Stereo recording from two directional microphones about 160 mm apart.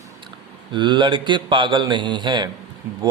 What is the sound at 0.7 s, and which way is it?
Speech, 30° right (ahead or behind).